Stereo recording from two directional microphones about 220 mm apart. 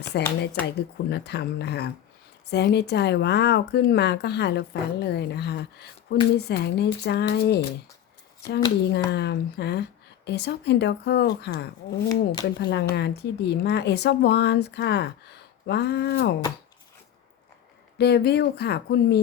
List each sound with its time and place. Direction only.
0.1 s speech: 50° left (ahead or behind)
8.9 s speech: 50° left (ahead or behind)
12.0 s speech: 20° left (ahead or behind)
12.5 s speech: 50° left (ahead or behind)
17.9 s speech: 50° left (ahead or behind)